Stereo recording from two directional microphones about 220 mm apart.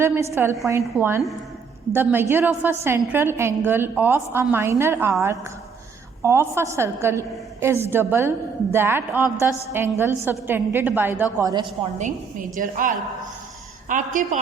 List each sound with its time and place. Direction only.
0.0 s a woman's voice: 10° right (ahead or behind)
12.5 s a man's voice: 35° right (ahead or behind)